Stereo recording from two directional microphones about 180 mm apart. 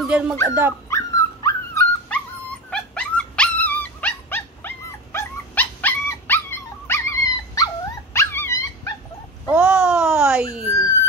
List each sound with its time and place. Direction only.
0.0 s speech: centre (ahead or behind)
0.8 s dog: 15° left (ahead or behind)
9.5 s a sound: 5° right (ahead or behind)